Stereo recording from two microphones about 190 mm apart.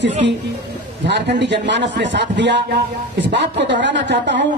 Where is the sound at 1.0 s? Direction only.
65° right (ahead or behind).